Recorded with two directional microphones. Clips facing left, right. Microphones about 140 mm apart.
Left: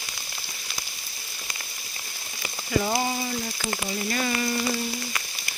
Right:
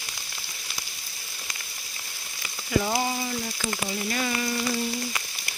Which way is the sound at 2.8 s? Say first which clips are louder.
Left 1 dB; centre (ahead or behind).